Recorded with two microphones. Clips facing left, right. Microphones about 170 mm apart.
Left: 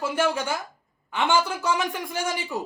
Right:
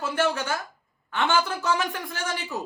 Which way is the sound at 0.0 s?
15° left (ahead or behind).